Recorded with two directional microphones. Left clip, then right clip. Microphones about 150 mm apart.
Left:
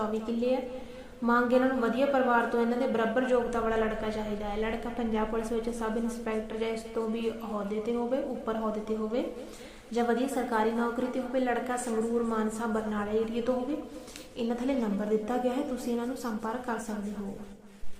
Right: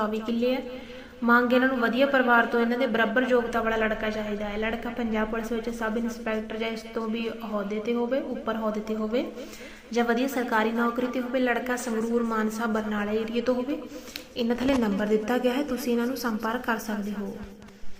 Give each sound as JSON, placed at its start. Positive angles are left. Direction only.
{"t": 0.0, "sound": "a woman's voice", "side_deg": -15}
{"t": 14.3, "sound": "a woman's voice", "side_deg": -30}